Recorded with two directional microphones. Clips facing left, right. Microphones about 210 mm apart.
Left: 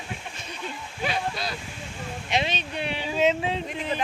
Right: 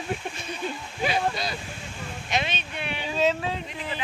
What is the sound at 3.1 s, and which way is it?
Speech, 20° left (ahead or behind).